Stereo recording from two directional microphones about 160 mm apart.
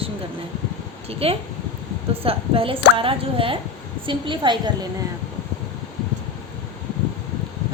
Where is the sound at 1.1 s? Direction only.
40° right (ahead or behind).